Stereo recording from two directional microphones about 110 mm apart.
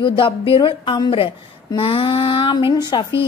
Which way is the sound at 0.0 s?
50° left (ahead or behind).